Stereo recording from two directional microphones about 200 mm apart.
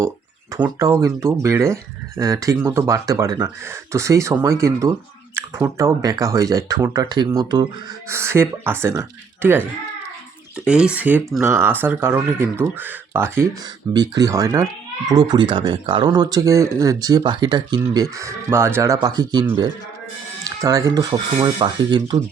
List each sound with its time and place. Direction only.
0.5 s speech: 15° right (ahead or behind)
10.7 s speech: 5° right (ahead or behind); by 22.2 s 20° right (ahead or behind)